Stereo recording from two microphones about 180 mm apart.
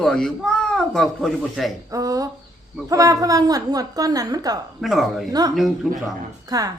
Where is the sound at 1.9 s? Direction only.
20° right (ahead or behind).